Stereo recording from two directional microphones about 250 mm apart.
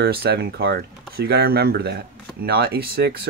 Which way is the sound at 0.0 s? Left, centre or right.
Right.